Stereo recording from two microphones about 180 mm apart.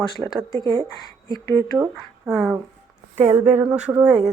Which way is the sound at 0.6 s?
30° right (ahead or behind).